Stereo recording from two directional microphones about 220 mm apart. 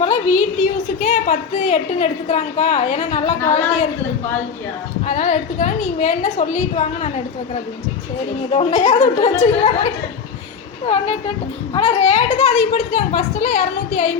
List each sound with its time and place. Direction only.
0.6 s a woman's voice: 35° left (ahead or behind)
5.0 s a woman's voice: 35° left (ahead or behind)
8.5 s a woman's voice: 30° left (ahead or behind)